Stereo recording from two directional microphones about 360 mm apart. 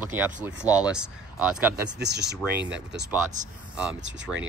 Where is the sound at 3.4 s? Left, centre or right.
Right.